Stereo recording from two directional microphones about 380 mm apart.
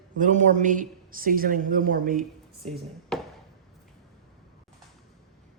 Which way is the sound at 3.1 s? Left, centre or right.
Centre.